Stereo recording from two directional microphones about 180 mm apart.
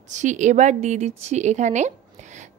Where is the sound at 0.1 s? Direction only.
45° right (ahead or behind).